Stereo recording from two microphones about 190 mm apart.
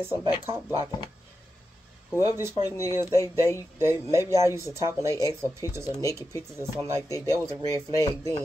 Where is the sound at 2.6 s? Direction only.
15° left (ahead or behind).